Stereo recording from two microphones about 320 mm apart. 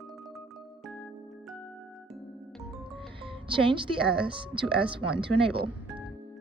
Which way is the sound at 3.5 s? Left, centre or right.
Centre.